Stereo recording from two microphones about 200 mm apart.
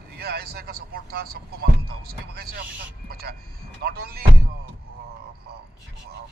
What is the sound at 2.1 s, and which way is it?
Speech, 50° right (ahead or behind).